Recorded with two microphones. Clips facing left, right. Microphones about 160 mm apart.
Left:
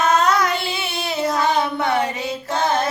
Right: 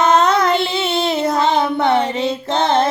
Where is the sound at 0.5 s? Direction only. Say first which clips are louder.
Right 7 dB; 25° right (ahead or behind).